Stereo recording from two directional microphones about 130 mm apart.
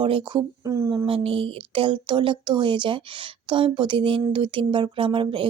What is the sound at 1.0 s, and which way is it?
Speech, 45° right (ahead or behind).